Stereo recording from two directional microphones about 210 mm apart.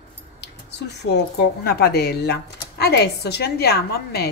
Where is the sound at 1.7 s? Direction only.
45° left (ahead or behind).